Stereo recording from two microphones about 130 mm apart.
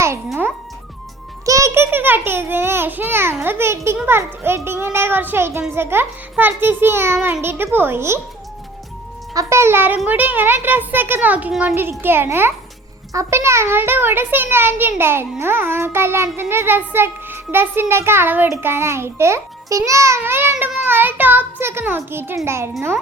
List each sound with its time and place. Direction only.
1.5 s a child's voice: 25° right (ahead or behind)
9.3 s a child's voice: 25° right (ahead or behind)